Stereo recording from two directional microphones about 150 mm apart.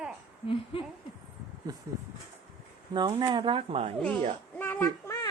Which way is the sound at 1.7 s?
30° right (ahead or behind).